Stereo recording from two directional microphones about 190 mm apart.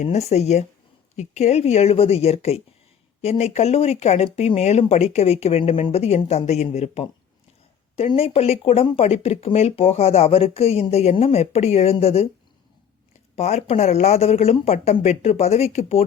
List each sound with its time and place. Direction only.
0.0 s speech: 35° left (ahead or behind)
13.3 s speech: 35° left (ahead or behind)